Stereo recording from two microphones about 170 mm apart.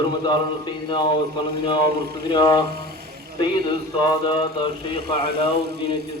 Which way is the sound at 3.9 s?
25° left (ahead or behind).